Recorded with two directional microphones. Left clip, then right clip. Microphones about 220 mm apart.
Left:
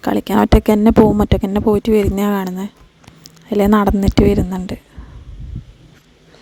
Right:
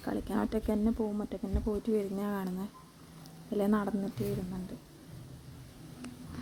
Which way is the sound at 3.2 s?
45° left (ahead or behind).